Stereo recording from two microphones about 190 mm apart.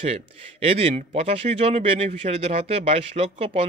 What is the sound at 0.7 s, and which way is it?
Speech, 30° right (ahead or behind).